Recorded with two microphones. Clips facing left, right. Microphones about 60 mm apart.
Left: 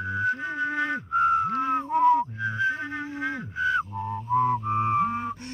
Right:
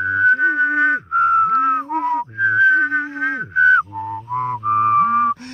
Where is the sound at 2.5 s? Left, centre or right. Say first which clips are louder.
Right 13 dB; right.